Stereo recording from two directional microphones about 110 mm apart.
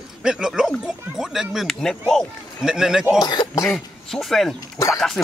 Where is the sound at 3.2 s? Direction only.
35° left (ahead or behind).